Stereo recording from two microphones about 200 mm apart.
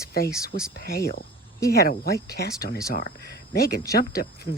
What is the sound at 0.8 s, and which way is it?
Speech, 50° left (ahead or behind).